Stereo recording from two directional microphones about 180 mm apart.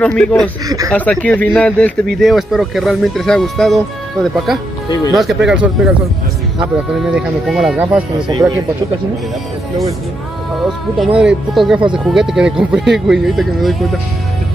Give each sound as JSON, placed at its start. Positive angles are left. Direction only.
{"t": 0.0, "sound": "speech", "side_deg": 5}
{"t": 0.7, "sound": "speech", "side_deg": -20}
{"t": 0.9, "sound": "speech", "side_deg": 10}
{"t": 4.8, "sound": "speech", "side_deg": 20}
{"t": 5.1, "sound": "speech", "side_deg": 0}
{"t": 11.0, "sound": "speech", "side_deg": -5}